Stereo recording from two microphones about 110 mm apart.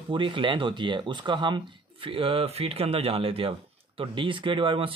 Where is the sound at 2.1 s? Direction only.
55° right (ahead or behind).